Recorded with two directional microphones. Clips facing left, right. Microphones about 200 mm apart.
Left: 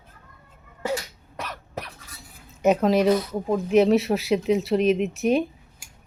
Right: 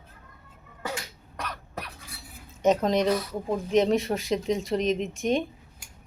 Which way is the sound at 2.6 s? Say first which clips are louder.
Left 3 dB; 10° left (ahead or behind).